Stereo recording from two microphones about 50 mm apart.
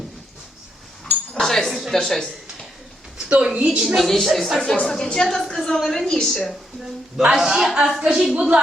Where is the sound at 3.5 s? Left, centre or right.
Right.